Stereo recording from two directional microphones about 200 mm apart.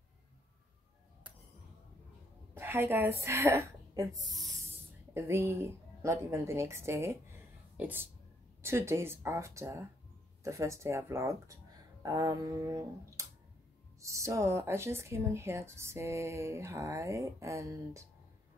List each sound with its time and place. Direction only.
2.5 s a woman's voice: 10° right (ahead or behind)